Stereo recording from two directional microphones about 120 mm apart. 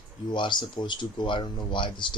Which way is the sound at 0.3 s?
40° left (ahead or behind).